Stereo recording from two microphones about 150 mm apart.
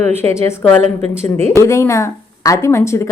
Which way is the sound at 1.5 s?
20° left (ahead or behind).